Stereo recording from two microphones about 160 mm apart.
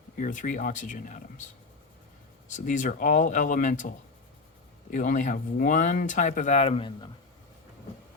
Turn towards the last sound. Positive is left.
turn(degrees=30)  # may be behind; listen again after turning